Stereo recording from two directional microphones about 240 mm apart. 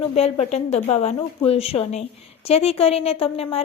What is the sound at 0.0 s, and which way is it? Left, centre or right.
A woman's voice, left.